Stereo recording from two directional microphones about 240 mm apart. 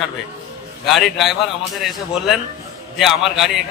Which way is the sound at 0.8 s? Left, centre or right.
Centre.